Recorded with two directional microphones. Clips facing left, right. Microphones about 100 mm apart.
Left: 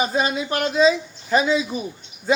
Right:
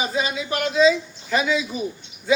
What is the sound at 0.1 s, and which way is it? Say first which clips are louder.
Speech: left 3 dB; 45° left (ahead or behind).